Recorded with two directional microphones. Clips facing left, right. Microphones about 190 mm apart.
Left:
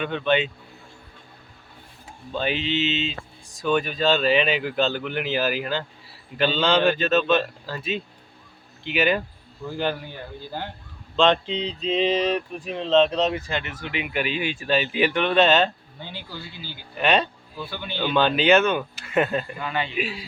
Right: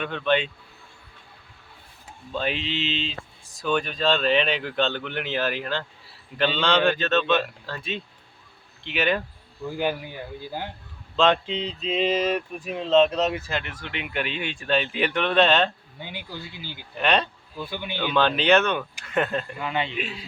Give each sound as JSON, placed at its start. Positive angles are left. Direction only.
{"t": 0.0, "sound": "speech", "side_deg": 0}
{"t": 2.3, "sound": "speech", "side_deg": 0}
{"t": 9.6, "sound": "speech", "side_deg": -10}
{"t": 16.0, "sound": "speech", "side_deg": -15}
{"t": 17.0, "sound": "speech", "side_deg": 0}
{"t": 17.6, "sound": "speech", "side_deg": -15}
{"t": 18.0, "sound": "speech", "side_deg": 5}
{"t": 19.5, "sound": "a man's voice", "side_deg": -20}
{"t": 19.9, "sound": "speech", "side_deg": 5}